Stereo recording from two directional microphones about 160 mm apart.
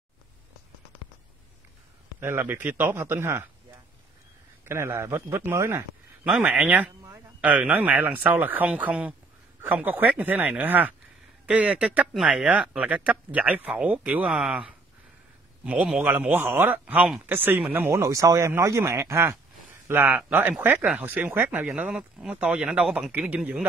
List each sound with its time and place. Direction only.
2.1 s speech: 15° right (ahead or behind)
4.6 s speech: 15° right (ahead or behind)
6.2 s speech: 5° right (ahead or behind)